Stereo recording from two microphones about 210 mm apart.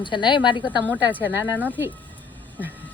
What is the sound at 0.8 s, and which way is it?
Speech, 5° left (ahead or behind).